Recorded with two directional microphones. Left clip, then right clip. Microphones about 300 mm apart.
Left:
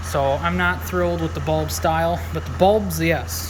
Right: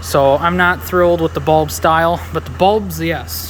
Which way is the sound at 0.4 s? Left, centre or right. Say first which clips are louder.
Right 8 dB; centre.